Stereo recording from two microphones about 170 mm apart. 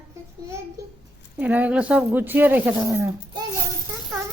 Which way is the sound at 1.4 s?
10° right (ahead or behind).